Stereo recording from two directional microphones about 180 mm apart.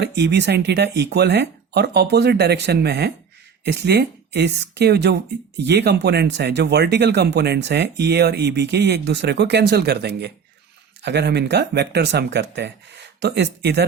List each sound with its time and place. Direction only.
0.0 s speech: 70° right (ahead or behind)